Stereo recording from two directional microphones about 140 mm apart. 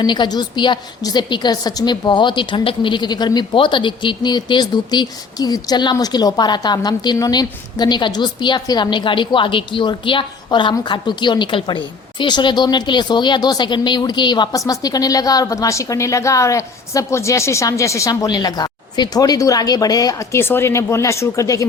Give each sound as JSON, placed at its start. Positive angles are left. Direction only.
{"t": 0.0, "sound": "a woman's voice", "side_deg": 35}